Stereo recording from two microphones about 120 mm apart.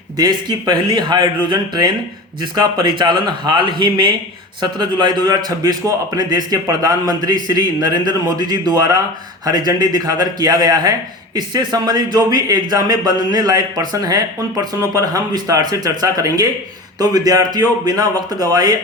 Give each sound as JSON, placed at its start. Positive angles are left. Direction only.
{"t": 0.2, "sound": "speech", "side_deg": -35}